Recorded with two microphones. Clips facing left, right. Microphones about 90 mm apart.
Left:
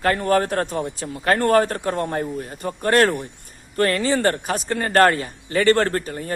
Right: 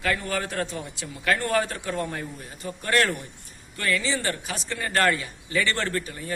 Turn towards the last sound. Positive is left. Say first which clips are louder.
# left 6 dB
turn(degrees=45)  # may be behind; listen again after turning